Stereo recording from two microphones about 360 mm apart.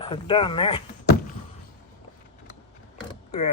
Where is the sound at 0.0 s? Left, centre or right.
Centre.